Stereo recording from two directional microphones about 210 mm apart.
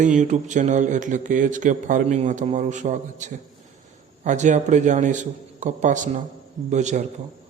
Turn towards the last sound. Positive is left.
turn(degrees=-35)  # may be behind; listen again after turning